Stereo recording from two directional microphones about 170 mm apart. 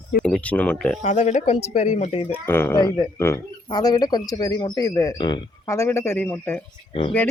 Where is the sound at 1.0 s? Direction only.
45° left (ahead or behind).